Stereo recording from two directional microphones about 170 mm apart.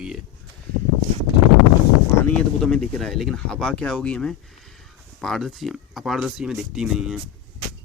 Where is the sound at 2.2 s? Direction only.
5° left (ahead or behind).